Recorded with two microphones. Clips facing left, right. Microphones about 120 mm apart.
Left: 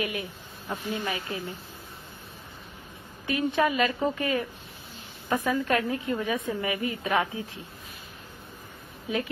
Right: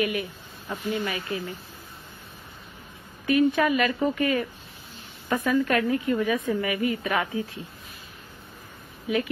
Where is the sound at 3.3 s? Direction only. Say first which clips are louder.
Right 4 dB; 20° left (ahead or behind).